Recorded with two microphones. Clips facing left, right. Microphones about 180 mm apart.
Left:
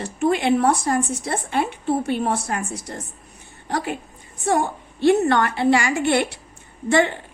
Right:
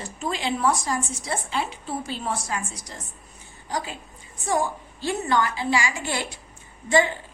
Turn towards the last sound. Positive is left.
turn(degrees=65)  # may be behind; listen again after turning